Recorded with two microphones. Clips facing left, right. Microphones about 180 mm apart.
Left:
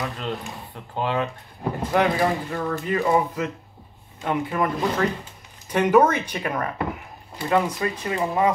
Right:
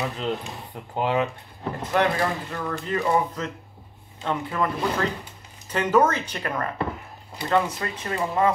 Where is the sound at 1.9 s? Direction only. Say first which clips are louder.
Left 2 dB; 10° left (ahead or behind).